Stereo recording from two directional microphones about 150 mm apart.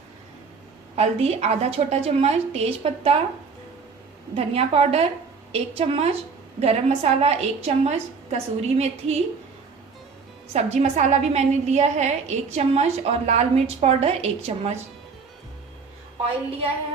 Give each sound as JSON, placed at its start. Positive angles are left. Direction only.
{"t": 0.9, "sound": "a woman's voice", "side_deg": -45}
{"t": 4.4, "sound": "a woman's voice", "side_deg": -40}
{"t": 10.5, "sound": "a woman's voice", "side_deg": -45}